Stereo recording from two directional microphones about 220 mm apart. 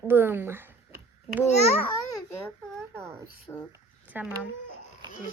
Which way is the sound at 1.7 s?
20° left (ahead or behind).